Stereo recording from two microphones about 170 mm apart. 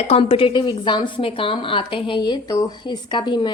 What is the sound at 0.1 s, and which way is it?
A woman's voice, 35° left (ahead or behind).